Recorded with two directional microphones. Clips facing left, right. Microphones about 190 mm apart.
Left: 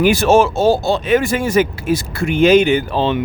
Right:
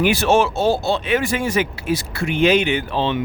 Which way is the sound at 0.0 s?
45° left (ahead or behind).